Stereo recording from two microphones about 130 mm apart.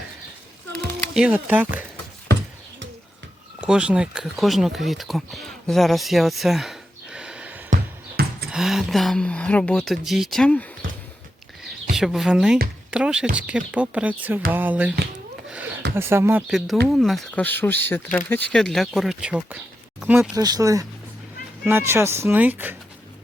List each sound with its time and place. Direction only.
1.1 s speech: 10° right (ahead or behind)
3.7 s speech: 10° right (ahead or behind); by 10.7 s 10° left (ahead or behind)
11.9 s speech: centre (ahead or behind)
15.4 s a sound: 10° right (ahead or behind)
16.5 s speech: centre (ahead or behind)
17.4 s speech: 15° left (ahead or behind); by 20.3 s 10° right (ahead or behind)
20.3 s speech: 30° right (ahead or behind); by 22.7 s 15° right (ahead or behind)